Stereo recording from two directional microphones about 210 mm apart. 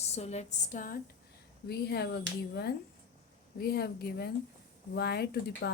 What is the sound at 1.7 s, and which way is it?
A woman's voice, 50° left (ahead or behind).